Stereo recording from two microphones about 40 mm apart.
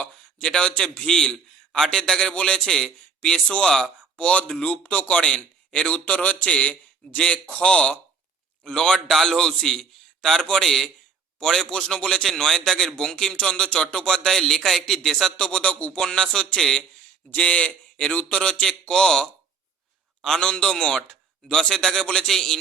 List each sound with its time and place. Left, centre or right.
0.4 s a man's voice: left
1.0 s a sound: centre
1.9 s a man's voice: centre
4.2 s a man's voice: left
5.9 s a man's voice: left; by 15.3 s centre
15.4 s a man's voice: left
17.3 s a man's voice: left
18.6 s a man's voice: centre
21.7 s a man's voice: centre